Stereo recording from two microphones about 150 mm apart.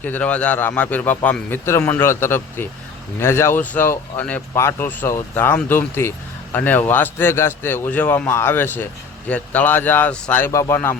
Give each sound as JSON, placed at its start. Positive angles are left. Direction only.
{"t": 0.0, "sound": "speech", "side_deg": 10}